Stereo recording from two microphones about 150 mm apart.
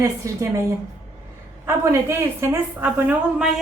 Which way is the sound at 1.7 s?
20° right (ahead or behind).